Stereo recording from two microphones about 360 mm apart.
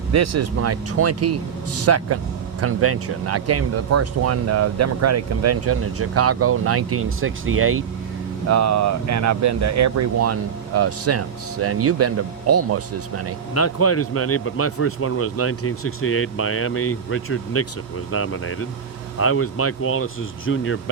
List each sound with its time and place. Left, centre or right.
0.1 s speech: right
8.4 s speech: right
13.5 s a man's voice: left